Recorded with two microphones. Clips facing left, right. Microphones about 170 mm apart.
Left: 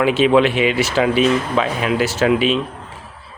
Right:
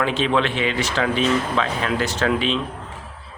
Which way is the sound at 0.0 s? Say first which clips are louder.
Left 7 dB; 10° left (ahead or behind).